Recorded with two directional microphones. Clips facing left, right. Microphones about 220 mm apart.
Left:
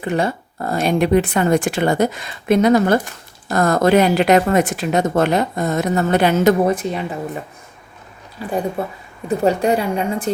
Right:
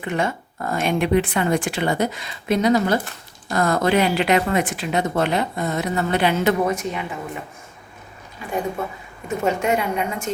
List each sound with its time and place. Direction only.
0.0 s speech: 35° left (ahead or behind)
8.4 s a woman's voice: 35° left (ahead or behind)